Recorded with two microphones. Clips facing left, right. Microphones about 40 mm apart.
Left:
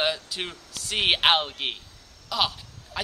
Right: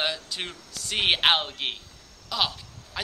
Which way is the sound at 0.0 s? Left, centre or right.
Centre.